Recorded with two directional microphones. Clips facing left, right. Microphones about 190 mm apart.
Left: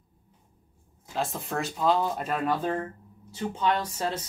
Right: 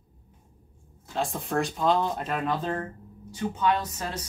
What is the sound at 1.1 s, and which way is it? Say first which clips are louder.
Speech: right 3 dB; centre (ahead or behind).